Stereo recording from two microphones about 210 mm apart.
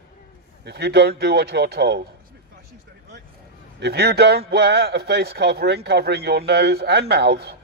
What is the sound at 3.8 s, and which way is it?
A man's voice, 50° right (ahead or behind).